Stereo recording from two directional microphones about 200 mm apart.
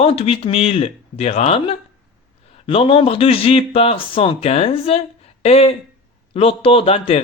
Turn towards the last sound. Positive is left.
turn(degrees=30)  # may be behind; listen again after turning